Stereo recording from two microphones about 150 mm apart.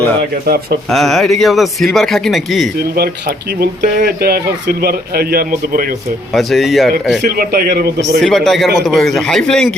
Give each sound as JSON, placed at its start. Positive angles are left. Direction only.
{"t": 0.4, "sound": "speech", "side_deg": -90}
{"t": 0.9, "sound": "speech", "side_deg": 0}
{"t": 2.9, "sound": "speech", "side_deg": -90}
{"t": 6.3, "sound": "speech", "side_deg": 0}
{"t": 7.3, "sound": "speech", "side_deg": -75}
{"t": 8.2, "sound": "speech", "side_deg": 0}